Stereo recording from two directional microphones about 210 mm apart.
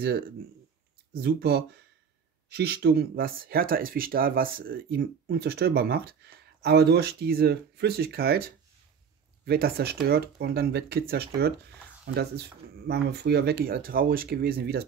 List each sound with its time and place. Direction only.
1.1 s speech: 50° right (ahead or behind)